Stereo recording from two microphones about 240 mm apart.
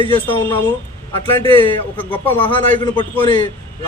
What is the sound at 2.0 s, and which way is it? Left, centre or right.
Speech, centre.